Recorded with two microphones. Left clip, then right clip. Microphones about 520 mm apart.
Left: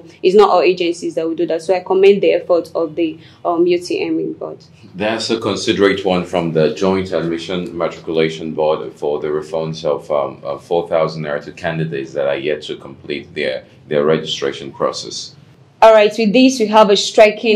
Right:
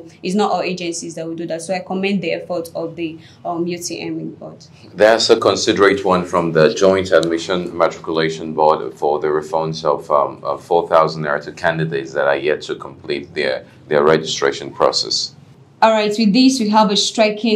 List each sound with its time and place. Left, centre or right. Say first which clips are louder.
0.2 s speech: left 8 dB; left
5.1 s speech: right 6 dB; right
6.0 s speech: right 1 dB; right
7.0 s speech: right 5 dB; right
8.1 s speech: left 2 dB; right
15.8 s a woman's voice: left 5 dB; left